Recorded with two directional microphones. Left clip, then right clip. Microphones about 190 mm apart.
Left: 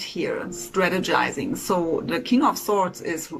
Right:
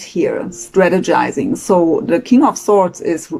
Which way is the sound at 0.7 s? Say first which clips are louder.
Right 9 dB; 30° right (ahead or behind).